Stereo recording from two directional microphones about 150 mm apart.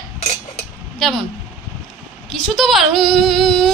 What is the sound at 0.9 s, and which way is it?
Speech, centre (ahead or behind).